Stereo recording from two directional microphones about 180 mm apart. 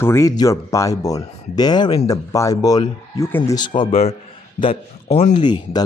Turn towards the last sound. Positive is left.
turn(degrees=25)  # may be behind; listen again after turning